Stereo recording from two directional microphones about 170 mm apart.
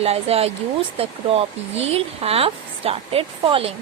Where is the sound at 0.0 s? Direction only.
35° right (ahead or behind).